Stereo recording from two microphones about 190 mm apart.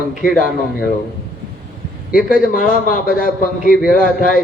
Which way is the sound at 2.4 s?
45° left (ahead or behind).